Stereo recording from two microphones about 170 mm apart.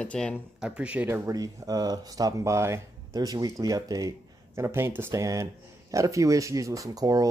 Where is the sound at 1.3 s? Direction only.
20° right (ahead or behind).